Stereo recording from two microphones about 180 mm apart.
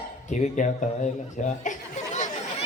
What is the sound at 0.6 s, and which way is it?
Speech, 45° left (ahead or behind).